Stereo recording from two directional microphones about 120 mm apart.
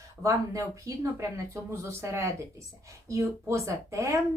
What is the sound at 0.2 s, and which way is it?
A woman's voice, 25° right (ahead or behind).